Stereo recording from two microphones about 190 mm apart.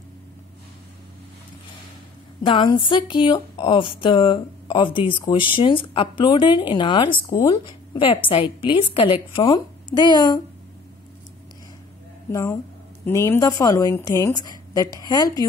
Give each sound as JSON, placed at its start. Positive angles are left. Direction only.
{"t": 2.4, "sound": "speech", "side_deg": 25}
{"t": 12.3, "sound": "speech", "side_deg": 15}